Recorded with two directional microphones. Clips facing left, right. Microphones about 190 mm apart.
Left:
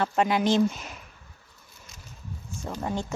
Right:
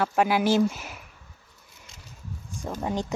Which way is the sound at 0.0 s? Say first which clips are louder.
Right 1 dB; 5° right (ahead or behind).